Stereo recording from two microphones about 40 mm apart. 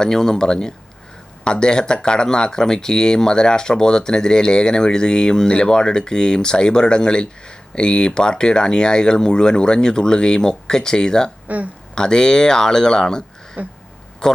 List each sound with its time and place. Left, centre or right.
0.0 s speech: centre
11.4 s speech: right
11.9 s a man's voice: centre